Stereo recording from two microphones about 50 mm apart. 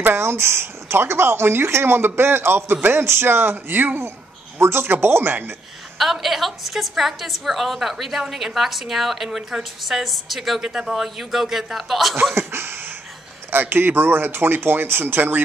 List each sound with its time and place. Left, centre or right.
0.1 s speech: right
4.6 s speech: right
5.9 s a woman's voice: centre
12.4 s a sound: right
13.5 s speech: right